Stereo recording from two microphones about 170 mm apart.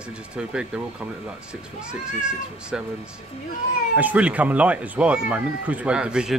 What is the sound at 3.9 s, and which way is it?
Speech, 10° right (ahead or behind).